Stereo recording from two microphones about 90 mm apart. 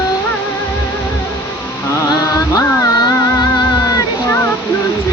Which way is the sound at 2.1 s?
40° left (ahead or behind).